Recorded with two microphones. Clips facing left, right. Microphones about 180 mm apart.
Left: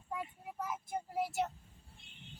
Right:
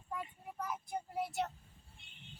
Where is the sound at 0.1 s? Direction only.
5° left (ahead or behind).